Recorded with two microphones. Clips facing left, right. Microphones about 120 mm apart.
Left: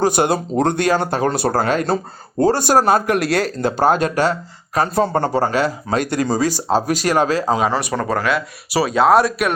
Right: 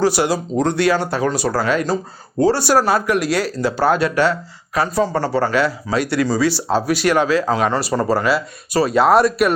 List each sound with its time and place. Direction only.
0.0 s speech: 50° left (ahead or behind)
7.7 s speech: centre (ahead or behind)